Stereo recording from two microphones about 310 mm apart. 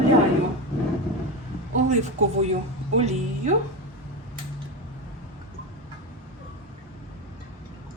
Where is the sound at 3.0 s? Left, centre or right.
Right.